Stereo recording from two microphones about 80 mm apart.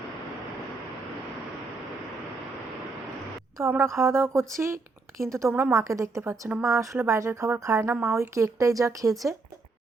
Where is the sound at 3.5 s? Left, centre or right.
Right.